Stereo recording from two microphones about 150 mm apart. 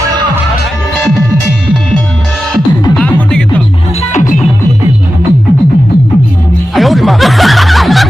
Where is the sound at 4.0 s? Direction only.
55° left (ahead or behind).